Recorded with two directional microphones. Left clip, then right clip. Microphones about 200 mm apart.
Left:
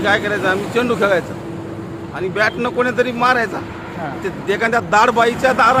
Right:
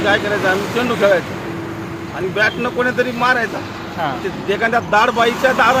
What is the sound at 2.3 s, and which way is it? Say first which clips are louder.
Speech: even; 20° left (ahead or behind).